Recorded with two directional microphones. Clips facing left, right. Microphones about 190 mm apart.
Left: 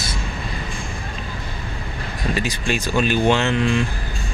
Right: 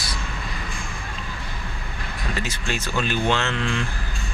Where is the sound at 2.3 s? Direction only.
15° left (ahead or behind).